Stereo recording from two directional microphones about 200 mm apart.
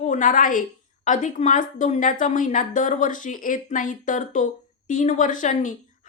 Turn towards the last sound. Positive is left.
turn(degrees=40)  # may be behind; listen again after turning